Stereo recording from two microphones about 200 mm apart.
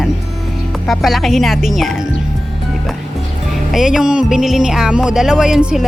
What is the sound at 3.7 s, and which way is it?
Speech, centre (ahead or behind).